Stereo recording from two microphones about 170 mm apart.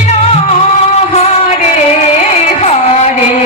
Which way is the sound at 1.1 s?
40° left (ahead or behind).